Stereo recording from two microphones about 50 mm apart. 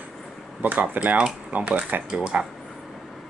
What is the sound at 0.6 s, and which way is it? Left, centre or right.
Speech, right.